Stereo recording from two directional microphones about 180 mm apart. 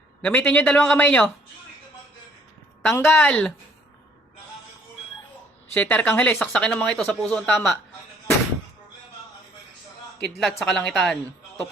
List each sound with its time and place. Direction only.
0.2 s a man's voice: 10° left (ahead or behind)
3.0 s speech: 5° left (ahead or behind)
5.7 s speech: 10° left (ahead or behind)
10.2 s speech: centre (ahead or behind)